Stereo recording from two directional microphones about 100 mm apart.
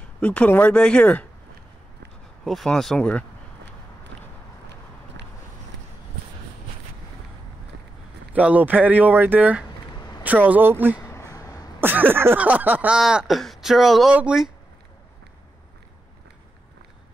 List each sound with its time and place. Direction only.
0.2 s speech: 10° left (ahead or behind)
2.4 s speech: centre (ahead or behind)
8.3 s speech: 15° right (ahead or behind)
9.8 s a sound: 40° left (ahead or behind)
10.2 s speech: 15° right (ahead or behind)
11.0 s a sound: 30° left (ahead or behind)
11.8 s speech: 20° right (ahead or behind)